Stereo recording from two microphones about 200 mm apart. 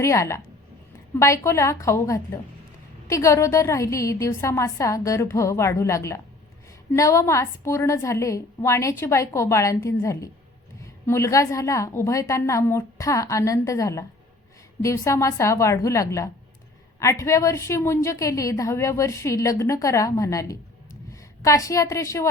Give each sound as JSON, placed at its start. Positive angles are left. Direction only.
{"t": 0.0, "sound": "a woman's voice", "side_deg": 15}